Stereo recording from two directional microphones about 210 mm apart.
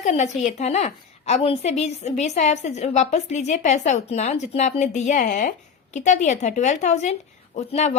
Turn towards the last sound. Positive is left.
turn(degrees=35)  # may be behind; listen again after turning